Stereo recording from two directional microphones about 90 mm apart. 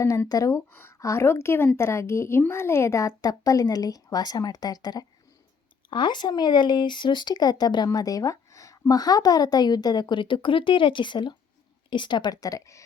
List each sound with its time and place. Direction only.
0.0 s a woman's voice: 35° left (ahead or behind)
0.7 s a woman's voice: 25° left (ahead or behind)
0.9 s a woman's voice: 35° left (ahead or behind)
5.9 s a woman's voice: 60° left (ahead or behind); by 12.8 s 35° left (ahead or behind)